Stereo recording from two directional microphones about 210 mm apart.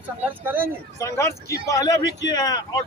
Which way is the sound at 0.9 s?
15° left (ahead or behind).